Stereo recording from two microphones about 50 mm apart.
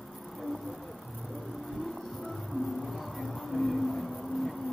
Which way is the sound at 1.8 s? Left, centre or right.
Centre.